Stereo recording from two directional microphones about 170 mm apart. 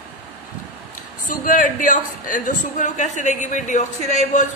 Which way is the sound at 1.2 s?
50° left (ahead or behind).